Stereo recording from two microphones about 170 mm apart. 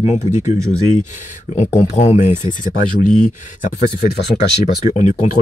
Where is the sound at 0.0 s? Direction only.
40° left (ahead or behind).